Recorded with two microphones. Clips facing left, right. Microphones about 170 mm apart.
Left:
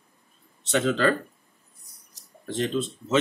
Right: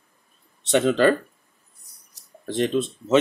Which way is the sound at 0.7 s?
30° right (ahead or behind).